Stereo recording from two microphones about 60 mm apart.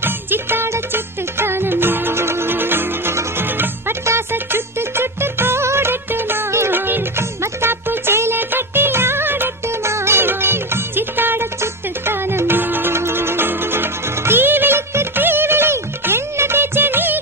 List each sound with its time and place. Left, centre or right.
0.0 s music: right
9.8 s music: right